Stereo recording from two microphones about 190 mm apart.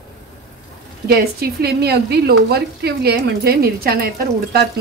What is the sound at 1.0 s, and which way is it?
Speech, 55° right (ahead or behind).